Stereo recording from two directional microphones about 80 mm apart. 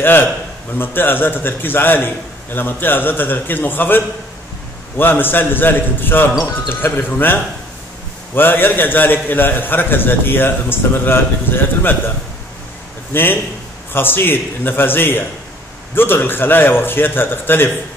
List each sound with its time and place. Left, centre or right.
0.7 s a man's voice: left
8.4 s a man's voice: left
13.1 s a man's voice: left